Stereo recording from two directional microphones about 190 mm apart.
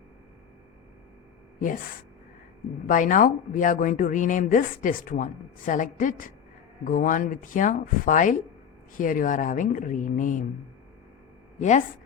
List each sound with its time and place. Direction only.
2.8 s speech: 45° left (ahead or behind)